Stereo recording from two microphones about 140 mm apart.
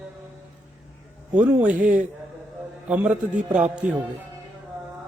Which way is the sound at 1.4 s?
10° right (ahead or behind).